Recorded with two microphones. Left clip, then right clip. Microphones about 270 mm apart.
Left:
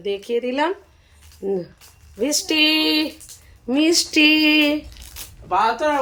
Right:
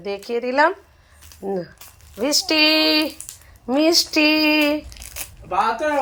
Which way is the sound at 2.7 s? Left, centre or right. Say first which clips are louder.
Right 2 dB; right.